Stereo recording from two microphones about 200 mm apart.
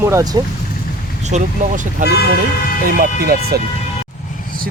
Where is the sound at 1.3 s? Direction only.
35° right (ahead or behind).